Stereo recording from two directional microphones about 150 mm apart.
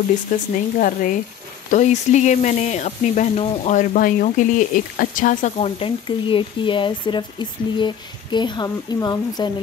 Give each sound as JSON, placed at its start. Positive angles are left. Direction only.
{"t": 0.3, "sound": "speech", "side_deg": 65}
{"t": 1.7, "sound": "speech", "side_deg": 50}
{"t": 5.6, "sound": "speech", "side_deg": 35}